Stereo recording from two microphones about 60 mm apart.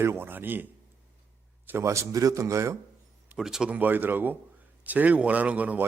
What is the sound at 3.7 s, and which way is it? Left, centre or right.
Speech, right.